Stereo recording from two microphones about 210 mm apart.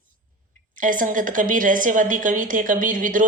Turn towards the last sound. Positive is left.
turn(degrees=-40)  # may be behind; listen again after turning